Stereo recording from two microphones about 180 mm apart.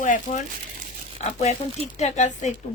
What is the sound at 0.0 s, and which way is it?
Speech, 45° left (ahead or behind).